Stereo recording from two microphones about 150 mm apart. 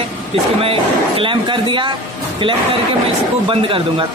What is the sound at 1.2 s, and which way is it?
Speech, 35° right (ahead or behind).